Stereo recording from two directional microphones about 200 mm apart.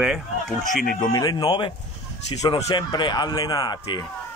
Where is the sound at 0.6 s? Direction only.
40° left (ahead or behind).